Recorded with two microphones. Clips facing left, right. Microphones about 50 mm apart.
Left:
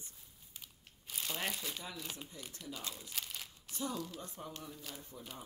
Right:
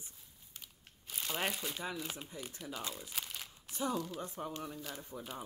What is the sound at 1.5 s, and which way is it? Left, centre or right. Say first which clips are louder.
Speech: right 4 dB; centre.